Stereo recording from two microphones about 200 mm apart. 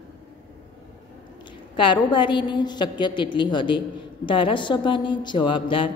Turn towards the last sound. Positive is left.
turn(degrees=25)  # may be behind; listen again after turning